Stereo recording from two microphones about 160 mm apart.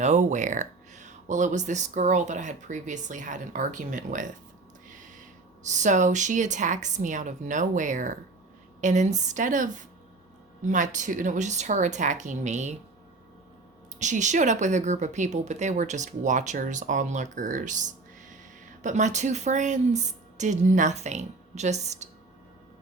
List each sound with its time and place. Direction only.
0.0 s a woman's voice: 50° right (ahead or behind)
5.6 s a woman's voice: 50° right (ahead or behind)
14.0 s a woman's voice: 50° right (ahead or behind)